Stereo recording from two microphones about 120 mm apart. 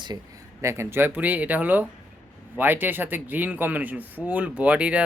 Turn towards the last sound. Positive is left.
turn(degrees=-10)  # may be behind; listen again after turning